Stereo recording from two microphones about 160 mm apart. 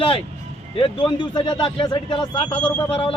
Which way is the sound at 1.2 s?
30° left (ahead or behind).